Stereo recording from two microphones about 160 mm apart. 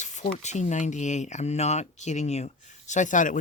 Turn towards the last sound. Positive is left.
turn(degrees=55)  # may be behind; listen again after turning